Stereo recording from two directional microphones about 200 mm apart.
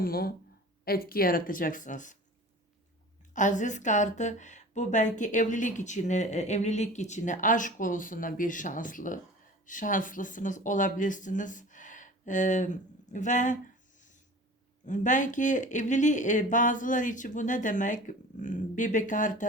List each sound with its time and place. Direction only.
0.0 s speech: 50° left (ahead or behind)
3.3 s speech: 40° left (ahead or behind)
14.8 s speech: 40° left (ahead or behind)